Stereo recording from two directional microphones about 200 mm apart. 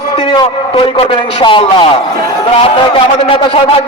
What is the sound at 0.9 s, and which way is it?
Speech, 25° left (ahead or behind).